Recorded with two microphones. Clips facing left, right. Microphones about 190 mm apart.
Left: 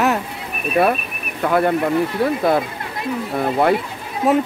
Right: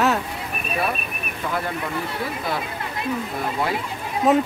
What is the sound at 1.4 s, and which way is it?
Speech, 65° left (ahead or behind).